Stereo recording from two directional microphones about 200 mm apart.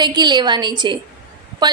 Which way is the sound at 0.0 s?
20° right (ahead or behind).